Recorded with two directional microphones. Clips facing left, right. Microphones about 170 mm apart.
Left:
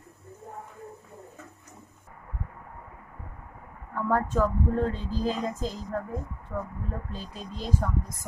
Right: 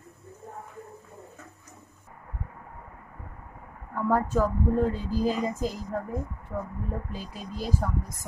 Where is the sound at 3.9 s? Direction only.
5° right (ahead or behind).